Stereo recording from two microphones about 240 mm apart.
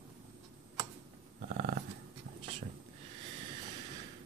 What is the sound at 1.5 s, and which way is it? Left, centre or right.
Dog, right.